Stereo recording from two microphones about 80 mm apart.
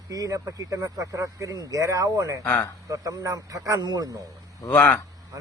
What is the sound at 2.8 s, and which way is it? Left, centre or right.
Speech, right.